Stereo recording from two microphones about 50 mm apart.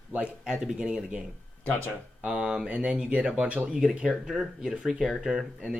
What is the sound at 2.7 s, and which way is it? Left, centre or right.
Speech, right.